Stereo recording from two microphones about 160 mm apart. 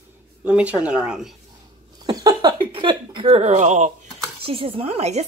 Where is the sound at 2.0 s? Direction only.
25° right (ahead or behind); by 3.8 s 45° right (ahead or behind).